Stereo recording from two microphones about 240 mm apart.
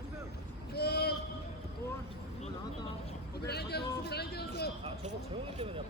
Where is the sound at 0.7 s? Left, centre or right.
Left.